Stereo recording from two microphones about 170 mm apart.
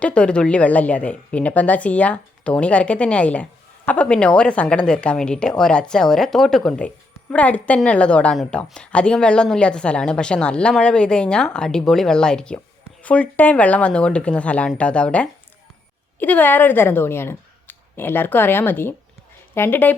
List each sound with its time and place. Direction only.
0.0 s speech: 5° left (ahead or behind)